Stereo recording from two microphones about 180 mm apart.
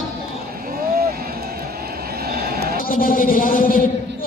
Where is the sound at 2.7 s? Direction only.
50° left (ahead or behind).